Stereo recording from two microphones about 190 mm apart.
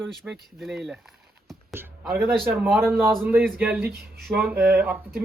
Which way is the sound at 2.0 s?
Centre (ahead or behind).